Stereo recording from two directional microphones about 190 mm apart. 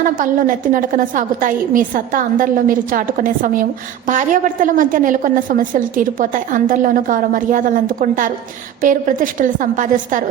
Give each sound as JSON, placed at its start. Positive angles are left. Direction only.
{"t": 0.0, "sound": "a woman's voice", "side_deg": -45}